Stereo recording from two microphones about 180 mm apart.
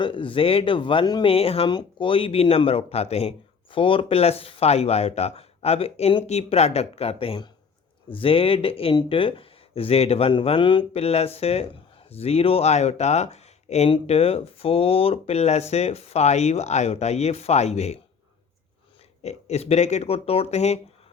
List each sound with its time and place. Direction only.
0.0 s speech: 30° left (ahead or behind)
19.2 s speech: 40° left (ahead or behind)